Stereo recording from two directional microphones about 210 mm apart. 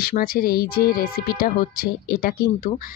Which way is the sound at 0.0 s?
45° left (ahead or behind).